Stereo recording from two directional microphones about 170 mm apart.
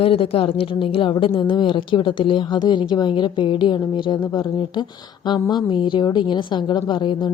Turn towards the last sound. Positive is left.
turn(degrees=25)  # may be behind; listen again after turning